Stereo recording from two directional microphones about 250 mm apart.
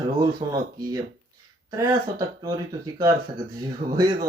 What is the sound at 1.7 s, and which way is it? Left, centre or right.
Speech, centre.